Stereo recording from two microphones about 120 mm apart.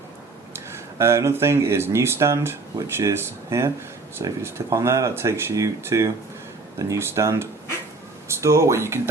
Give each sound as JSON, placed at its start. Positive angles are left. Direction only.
{"t": 0.5, "sound": "speech", "side_deg": -25}